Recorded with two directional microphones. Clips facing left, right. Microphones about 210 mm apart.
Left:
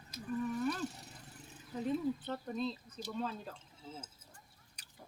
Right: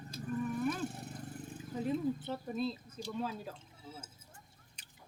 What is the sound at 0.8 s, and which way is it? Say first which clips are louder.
Vehicle: right 4 dB; 55° right (ahead or behind).